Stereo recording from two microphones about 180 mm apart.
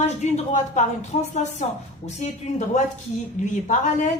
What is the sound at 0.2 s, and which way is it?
A woman's voice, 40° left (ahead or behind).